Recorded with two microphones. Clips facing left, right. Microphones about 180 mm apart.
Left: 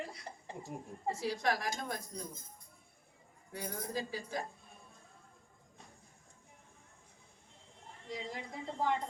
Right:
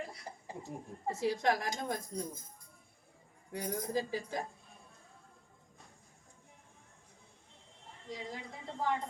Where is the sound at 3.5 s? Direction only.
20° right (ahead or behind).